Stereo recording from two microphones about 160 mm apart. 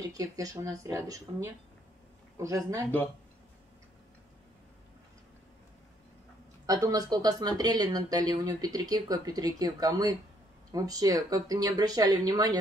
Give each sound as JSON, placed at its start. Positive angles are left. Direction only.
{"t": 0.1, "sound": "speech", "side_deg": -20}
{"t": 6.6, "sound": "speech", "side_deg": -20}